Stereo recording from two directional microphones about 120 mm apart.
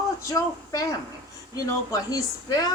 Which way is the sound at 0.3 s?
30° left (ahead or behind).